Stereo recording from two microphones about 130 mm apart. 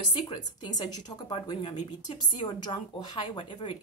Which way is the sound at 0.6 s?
35° left (ahead or behind).